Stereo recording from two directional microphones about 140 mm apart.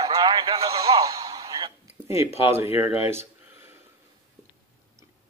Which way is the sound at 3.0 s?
15° right (ahead or behind).